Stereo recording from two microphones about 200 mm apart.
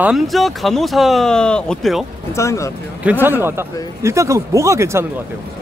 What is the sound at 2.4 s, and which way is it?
Speech, 15° left (ahead or behind).